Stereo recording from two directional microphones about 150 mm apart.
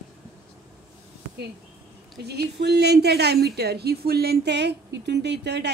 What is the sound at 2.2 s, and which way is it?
A woman's voice, 90° right.